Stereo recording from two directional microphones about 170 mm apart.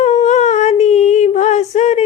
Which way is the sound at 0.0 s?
40° left (ahead or behind).